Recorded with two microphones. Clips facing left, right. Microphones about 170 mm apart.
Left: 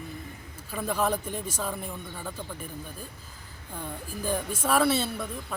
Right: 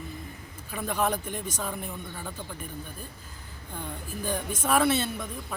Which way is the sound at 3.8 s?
5° left (ahead or behind).